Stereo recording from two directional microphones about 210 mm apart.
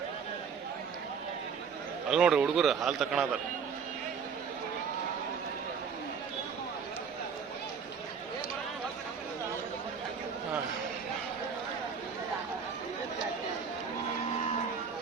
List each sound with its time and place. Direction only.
2.0 s a man's voice: 5° right (ahead or behind)